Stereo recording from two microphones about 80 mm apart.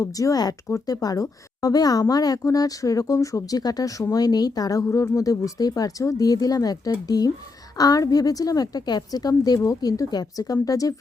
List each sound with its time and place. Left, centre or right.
0.0 s a woman's voice: left
4.9 s a woman's voice: left